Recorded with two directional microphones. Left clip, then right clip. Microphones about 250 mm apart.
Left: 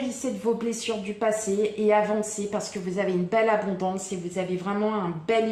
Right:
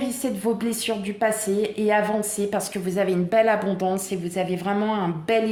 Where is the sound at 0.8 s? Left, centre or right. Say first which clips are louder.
Right 4 dB; right.